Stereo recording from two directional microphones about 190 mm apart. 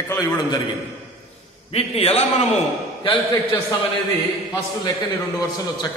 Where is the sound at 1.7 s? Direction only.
30° left (ahead or behind).